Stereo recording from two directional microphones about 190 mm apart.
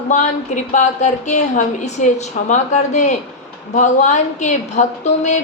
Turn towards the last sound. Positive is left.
turn(degrees=40)  # may be behind; listen again after turning